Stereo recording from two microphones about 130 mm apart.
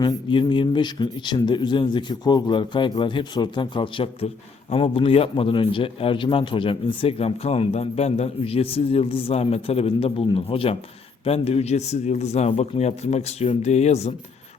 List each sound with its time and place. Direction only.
0.0 s a man's voice: 40° left (ahead or behind); by 14.1 s 55° left (ahead or behind)